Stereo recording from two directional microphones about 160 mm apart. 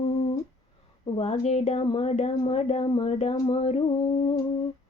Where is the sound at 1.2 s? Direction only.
40° left (ahead or behind).